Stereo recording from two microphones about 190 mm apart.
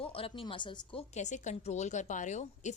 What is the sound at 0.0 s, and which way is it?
A woman's voice, 30° left (ahead or behind).